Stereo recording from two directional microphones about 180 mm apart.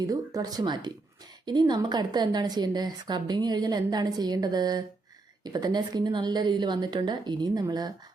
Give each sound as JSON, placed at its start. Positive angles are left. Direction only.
{"t": 0.1, "sound": "a woman's voice", "side_deg": -20}